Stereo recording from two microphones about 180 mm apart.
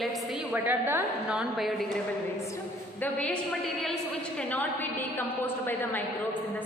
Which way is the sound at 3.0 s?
5° left (ahead or behind).